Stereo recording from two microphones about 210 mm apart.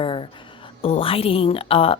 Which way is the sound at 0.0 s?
25° left (ahead or behind).